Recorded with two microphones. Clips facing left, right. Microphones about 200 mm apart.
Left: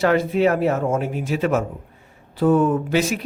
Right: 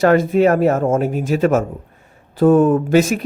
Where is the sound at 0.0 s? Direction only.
45° right (ahead or behind).